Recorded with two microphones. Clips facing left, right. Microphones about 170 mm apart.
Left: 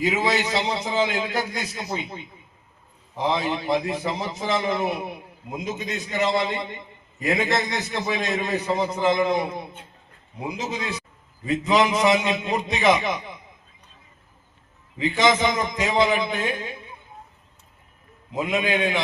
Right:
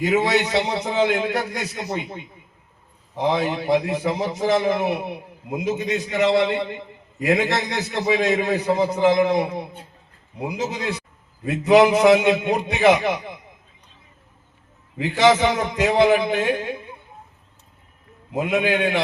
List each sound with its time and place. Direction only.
0.0 s a man's voice: 65° right (ahead or behind)
3.2 s a man's voice: 70° right (ahead or behind)
10.6 s a man's voice: 75° right (ahead or behind)
14.9 s a man's voice: 70° right (ahead or behind)
18.3 s a man's voice: 70° right (ahead or behind)